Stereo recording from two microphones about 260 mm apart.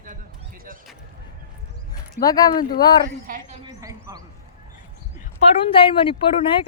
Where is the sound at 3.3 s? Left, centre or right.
Right.